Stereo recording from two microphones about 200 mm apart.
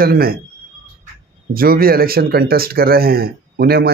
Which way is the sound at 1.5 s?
45° right (ahead or behind).